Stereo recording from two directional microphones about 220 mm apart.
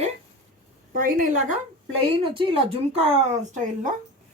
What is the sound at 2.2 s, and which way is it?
Speech, 25° right (ahead or behind).